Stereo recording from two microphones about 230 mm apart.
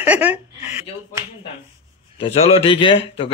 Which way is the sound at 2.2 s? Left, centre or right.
Left.